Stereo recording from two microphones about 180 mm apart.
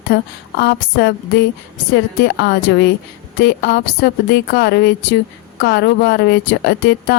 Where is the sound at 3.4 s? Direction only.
65° left (ahead or behind).